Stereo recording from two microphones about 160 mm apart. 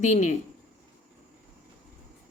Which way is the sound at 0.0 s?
50° left (ahead or behind).